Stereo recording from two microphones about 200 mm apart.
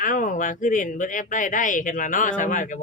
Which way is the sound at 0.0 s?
40° left (ahead or behind).